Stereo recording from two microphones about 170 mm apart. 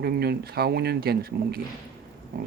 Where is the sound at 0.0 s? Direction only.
65° right (ahead or behind).